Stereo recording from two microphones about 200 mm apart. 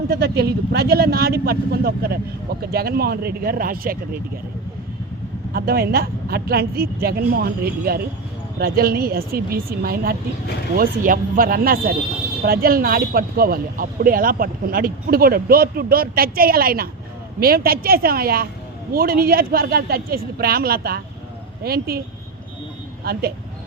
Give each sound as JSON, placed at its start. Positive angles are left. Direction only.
{"t": 0.1, "sound": "speech", "side_deg": -50}
{"t": 5.5, "sound": "speech", "side_deg": -50}